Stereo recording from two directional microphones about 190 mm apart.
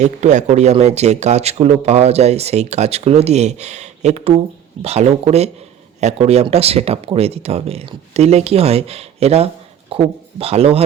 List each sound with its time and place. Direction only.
0.0 s speech: 40° right (ahead or behind)